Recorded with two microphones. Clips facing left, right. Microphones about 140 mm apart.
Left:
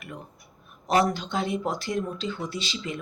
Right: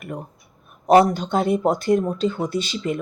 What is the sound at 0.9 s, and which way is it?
Speech, 50° right (ahead or behind).